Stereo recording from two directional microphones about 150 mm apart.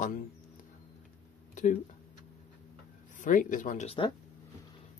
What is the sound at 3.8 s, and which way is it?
Speech, 40° left (ahead or behind).